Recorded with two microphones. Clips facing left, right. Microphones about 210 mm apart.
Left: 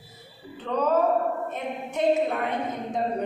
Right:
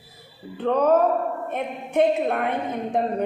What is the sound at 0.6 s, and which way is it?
Speech, 55° right (ahead or behind).